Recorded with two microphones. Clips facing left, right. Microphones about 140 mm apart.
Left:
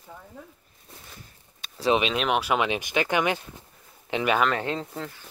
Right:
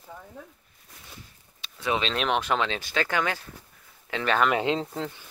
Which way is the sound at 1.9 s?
15° left (ahead or behind).